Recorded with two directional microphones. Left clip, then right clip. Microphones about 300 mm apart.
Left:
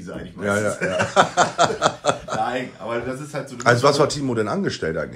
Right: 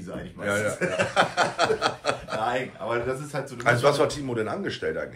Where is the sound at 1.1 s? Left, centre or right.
Centre.